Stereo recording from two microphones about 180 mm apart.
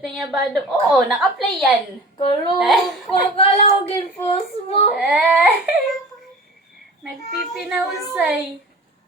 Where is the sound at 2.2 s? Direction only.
30° left (ahead or behind).